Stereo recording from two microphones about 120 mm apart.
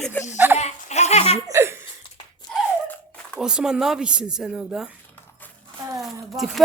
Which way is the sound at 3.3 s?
5° right (ahead or behind).